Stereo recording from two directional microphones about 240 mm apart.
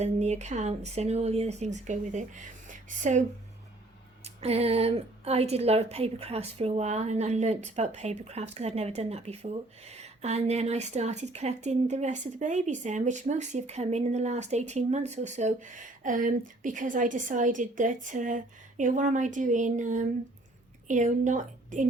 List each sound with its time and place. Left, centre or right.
0.0 s a woman's voice: right